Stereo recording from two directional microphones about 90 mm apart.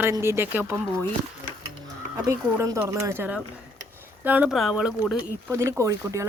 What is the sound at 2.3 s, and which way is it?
Speech, 35° right (ahead or behind).